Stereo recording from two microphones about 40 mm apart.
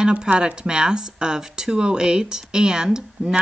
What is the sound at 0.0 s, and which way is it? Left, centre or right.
Speech, right.